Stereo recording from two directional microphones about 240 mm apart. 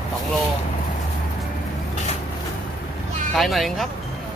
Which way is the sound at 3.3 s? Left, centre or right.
Centre.